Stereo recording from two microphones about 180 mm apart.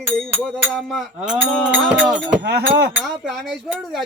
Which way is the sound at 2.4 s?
65° right (ahead or behind).